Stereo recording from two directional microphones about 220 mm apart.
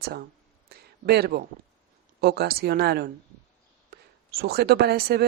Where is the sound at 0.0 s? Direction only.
45° right (ahead or behind).